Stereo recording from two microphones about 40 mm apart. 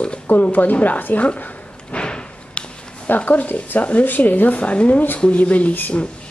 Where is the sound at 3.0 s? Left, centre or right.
Left.